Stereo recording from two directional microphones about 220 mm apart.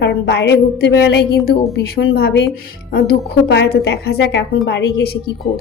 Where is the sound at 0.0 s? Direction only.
50° left (ahead or behind).